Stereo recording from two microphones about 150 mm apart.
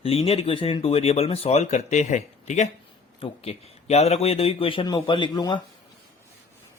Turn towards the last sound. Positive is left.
turn(degrees=30)  # may be behind; listen again after turning